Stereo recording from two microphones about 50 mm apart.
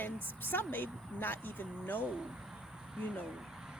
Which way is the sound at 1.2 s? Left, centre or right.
Left.